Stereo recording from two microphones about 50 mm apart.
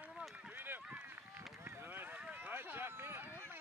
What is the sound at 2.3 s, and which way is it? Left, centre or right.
Run, right.